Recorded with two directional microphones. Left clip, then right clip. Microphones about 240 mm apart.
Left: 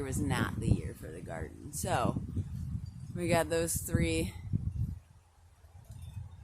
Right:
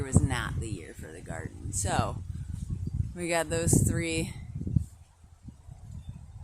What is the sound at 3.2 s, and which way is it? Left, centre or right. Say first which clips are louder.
Speech: right 1 dB; centre.